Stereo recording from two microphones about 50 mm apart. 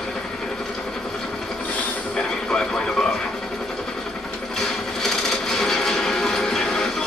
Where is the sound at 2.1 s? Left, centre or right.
Centre.